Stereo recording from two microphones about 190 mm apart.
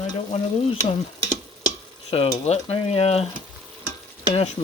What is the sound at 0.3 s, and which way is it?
Stir, 35° left (ahead or behind).